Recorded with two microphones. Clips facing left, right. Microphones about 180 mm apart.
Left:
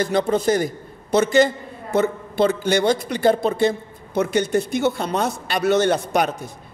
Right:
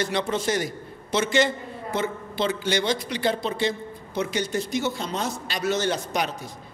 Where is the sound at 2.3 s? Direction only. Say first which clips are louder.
Left 7 dB; 50° left (ahead or behind).